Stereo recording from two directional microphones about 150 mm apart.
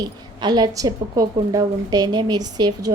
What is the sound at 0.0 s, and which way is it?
A woman's voice, 25° right (ahead or behind).